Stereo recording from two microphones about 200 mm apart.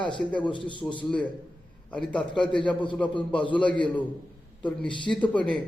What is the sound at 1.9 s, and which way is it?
A man's voice, 5° left (ahead or behind).